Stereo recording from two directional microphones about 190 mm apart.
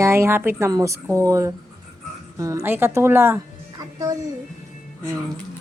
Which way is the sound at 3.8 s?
20° right (ahead or behind).